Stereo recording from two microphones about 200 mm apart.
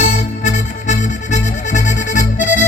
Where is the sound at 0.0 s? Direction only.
35° left (ahead or behind).